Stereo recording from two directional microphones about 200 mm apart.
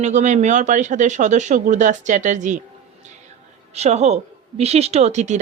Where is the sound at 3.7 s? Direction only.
35° right (ahead or behind).